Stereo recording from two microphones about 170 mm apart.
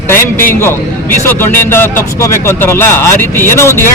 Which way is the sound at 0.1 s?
15° left (ahead or behind).